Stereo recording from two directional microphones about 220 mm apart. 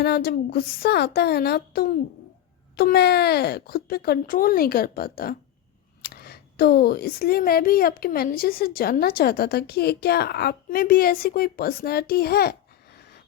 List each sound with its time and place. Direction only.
0.0 s speech: 45° left (ahead or behind)